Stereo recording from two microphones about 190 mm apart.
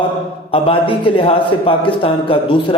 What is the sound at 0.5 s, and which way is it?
A man's voice, 30° left (ahead or behind).